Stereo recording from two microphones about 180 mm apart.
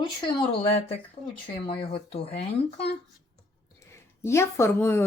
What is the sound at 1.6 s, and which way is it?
Speech, 30° left (ahead or behind).